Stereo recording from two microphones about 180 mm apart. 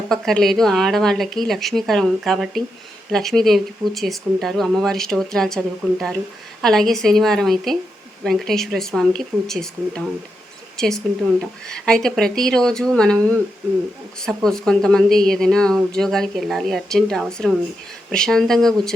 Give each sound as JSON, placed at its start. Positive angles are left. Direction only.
{"t": 0.1, "sound": "speech", "side_deg": 0}
{"t": 14.2, "sound": "speech", "side_deg": 5}